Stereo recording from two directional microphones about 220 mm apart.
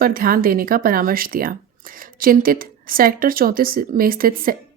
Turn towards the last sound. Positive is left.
turn(degrees=-40)  # may be behind; listen again after turning